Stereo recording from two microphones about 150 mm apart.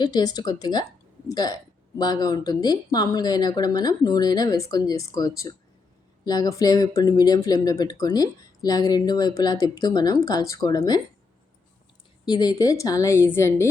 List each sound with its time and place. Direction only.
0.0 s speech: 25° left (ahead or behind)
12.2 s speech: 25° left (ahead or behind)